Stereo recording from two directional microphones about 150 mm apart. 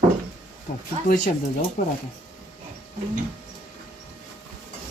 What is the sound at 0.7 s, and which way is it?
Speech, 60° left (ahead or behind).